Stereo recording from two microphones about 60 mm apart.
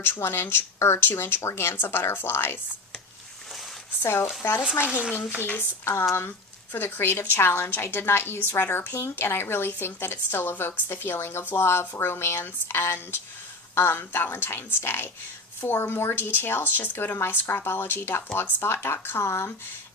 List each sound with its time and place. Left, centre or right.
0.0 s speech: left
4.0 s speech: left
5.5 s speech: left
5.9 s speech: left
9.0 s speech: left